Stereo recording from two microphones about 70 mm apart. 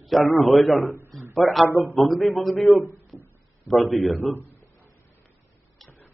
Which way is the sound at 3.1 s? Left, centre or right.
Centre.